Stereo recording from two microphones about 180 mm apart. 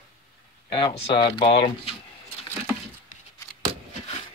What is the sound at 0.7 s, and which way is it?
Speech, 30° left (ahead or behind).